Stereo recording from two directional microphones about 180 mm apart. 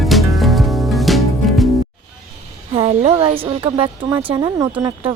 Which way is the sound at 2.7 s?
35° right (ahead or behind).